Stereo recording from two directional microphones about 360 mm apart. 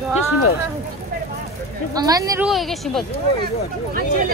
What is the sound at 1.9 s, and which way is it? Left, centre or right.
A woman's voice, centre.